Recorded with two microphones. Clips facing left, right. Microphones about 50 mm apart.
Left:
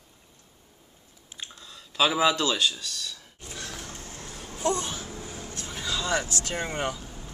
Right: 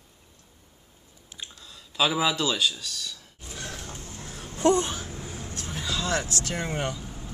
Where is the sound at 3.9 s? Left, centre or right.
Left.